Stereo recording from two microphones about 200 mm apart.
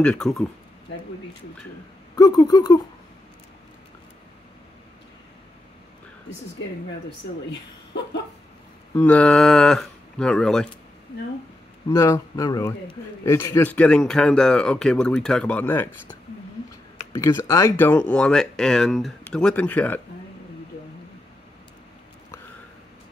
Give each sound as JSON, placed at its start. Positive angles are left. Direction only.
{"t": 0.0, "sound": "a man's voice", "side_deg": 5}
{"t": 2.1, "sound": "speech", "side_deg": 20}
{"t": 8.9, "sound": "a man's voice", "side_deg": 10}
{"t": 11.9, "sound": "a man's voice", "side_deg": 15}